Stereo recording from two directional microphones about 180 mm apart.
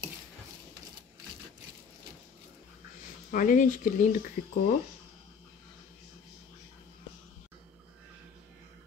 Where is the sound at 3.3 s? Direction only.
45° left (ahead or behind).